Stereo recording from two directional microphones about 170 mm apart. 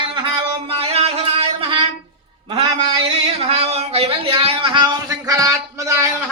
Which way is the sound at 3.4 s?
35° right (ahead or behind).